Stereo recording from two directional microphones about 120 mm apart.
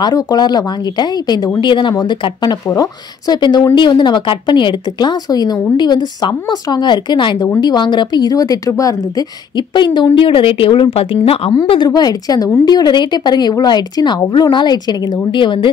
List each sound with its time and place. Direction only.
0.0 s speech: 35° left (ahead or behind)